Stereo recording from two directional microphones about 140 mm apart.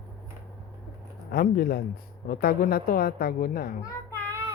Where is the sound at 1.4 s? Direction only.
90° left.